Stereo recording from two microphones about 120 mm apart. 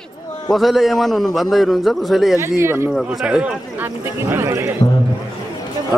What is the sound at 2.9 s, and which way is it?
Speech, 5° right (ahead or behind).